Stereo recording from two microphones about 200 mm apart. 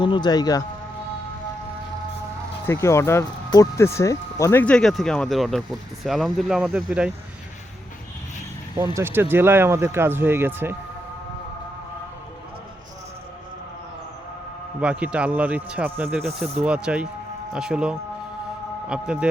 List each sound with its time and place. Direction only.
0.0 s speech: 25° left (ahead or behind)
2.6 s speech: 15° left (ahead or behind); by 7.1 s 5° right (ahead or behind)
9.0 s speech: 10° right (ahead or behind)
14.8 s speech: 5° right (ahead or behind)